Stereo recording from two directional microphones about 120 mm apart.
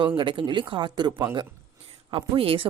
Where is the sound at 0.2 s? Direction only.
45° right (ahead or behind).